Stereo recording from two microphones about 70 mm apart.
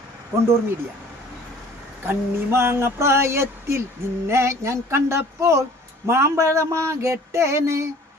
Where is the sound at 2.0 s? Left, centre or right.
Right.